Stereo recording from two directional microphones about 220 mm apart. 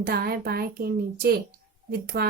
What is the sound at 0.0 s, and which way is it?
A woman's voice, 45° right (ahead or behind).